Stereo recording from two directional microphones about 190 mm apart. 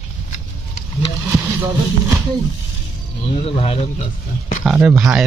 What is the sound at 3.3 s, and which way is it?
Speech, 30° left (ahead or behind).